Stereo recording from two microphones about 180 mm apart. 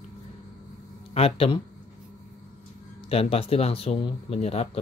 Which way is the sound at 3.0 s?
35° left (ahead or behind).